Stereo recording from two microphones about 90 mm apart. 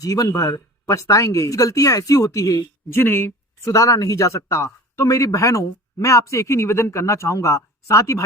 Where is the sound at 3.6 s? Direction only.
35° left (ahead or behind).